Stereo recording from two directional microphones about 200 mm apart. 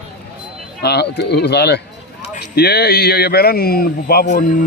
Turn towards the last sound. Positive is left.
turn(degrees=50)  # may be behind; listen again after turning